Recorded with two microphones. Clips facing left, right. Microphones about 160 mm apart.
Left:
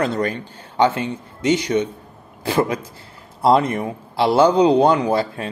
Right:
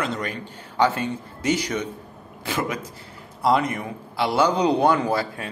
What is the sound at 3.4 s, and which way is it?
A man's voice, 30° left (ahead or behind).